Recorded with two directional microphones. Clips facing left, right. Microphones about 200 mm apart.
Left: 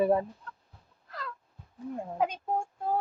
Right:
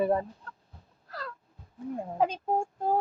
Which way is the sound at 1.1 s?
35° right (ahead or behind).